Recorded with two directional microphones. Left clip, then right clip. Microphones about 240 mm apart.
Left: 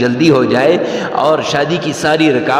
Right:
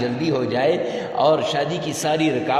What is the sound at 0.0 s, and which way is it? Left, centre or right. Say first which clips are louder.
A man's voice: left 11 dB; left.